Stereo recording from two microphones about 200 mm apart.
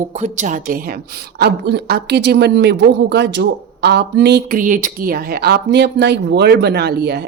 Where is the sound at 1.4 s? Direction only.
55° right (ahead or behind).